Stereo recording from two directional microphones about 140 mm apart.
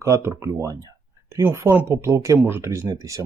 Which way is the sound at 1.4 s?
20° right (ahead or behind).